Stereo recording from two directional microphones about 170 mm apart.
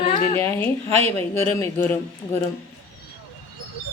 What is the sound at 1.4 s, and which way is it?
Speech, 15° left (ahead or behind).